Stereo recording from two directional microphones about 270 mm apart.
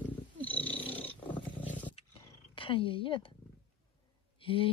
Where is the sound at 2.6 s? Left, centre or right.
Centre.